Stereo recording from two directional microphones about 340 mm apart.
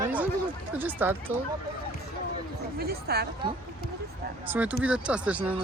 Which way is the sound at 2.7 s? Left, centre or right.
Right.